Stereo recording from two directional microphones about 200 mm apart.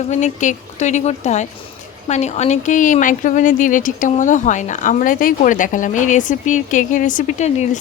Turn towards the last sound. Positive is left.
turn(degrees=35)  # may be behind; listen again after turning